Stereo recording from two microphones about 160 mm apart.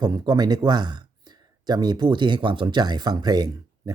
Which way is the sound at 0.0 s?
25° right (ahead or behind).